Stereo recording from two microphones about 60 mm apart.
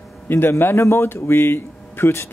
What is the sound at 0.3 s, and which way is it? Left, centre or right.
Speech, left.